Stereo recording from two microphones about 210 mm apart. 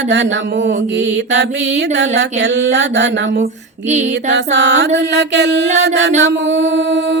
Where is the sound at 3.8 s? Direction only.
35° right (ahead or behind).